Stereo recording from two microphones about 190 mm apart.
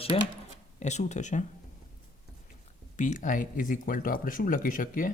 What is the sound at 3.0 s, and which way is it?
Speech, 40° left (ahead or behind).